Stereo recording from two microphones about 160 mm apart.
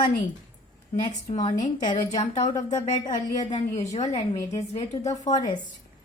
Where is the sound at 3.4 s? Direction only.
45° left (ahead or behind).